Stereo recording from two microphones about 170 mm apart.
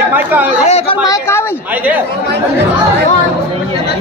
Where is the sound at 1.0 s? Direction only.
20° left (ahead or behind).